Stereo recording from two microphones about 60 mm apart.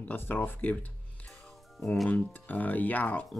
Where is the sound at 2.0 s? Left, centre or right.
Left.